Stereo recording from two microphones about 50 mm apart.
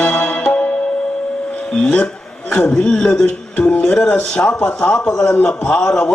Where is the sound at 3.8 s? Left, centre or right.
Centre.